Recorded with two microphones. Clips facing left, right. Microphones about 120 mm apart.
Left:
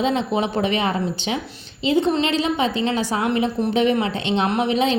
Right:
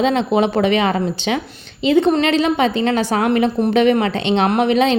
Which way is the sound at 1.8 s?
65° right (ahead or behind).